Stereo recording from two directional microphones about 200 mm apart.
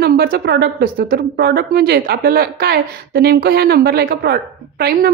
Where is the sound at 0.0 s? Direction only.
50° right (ahead or behind).